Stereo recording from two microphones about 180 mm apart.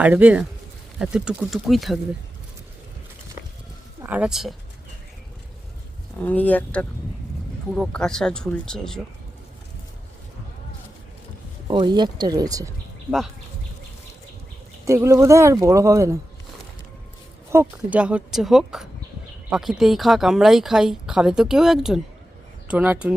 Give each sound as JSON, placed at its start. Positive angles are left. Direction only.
{"t": 0.0, "sound": "speech", "side_deg": -10}
{"t": 4.0, "sound": "speech", "side_deg": -10}
{"t": 6.2, "sound": "speech", "side_deg": 10}
{"t": 11.7, "sound": "speech", "side_deg": -25}
{"t": 13.1, "sound": "speech", "side_deg": 0}
{"t": 14.8, "sound": "speech", "side_deg": -15}
{"t": 17.5, "sound": "speech", "side_deg": -10}